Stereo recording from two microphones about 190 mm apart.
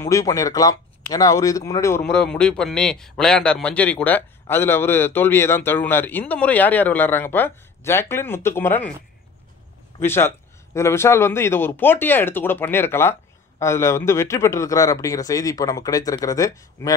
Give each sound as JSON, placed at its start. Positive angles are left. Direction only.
{"t": 0.0, "sound": "a man's voice", "side_deg": 15}
{"t": 2.0, "sound": "a man's voice", "side_deg": 5}
{"t": 9.9, "sound": "a man's voice", "side_deg": 15}